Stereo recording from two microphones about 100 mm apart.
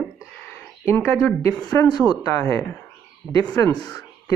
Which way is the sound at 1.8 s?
25° left (ahead or behind).